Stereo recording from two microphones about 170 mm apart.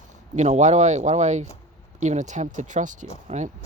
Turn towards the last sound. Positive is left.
turn(degrees=-45)  # may be behind; listen again after turning